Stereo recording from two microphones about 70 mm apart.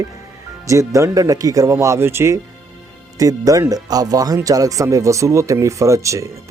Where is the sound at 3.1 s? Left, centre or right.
Right.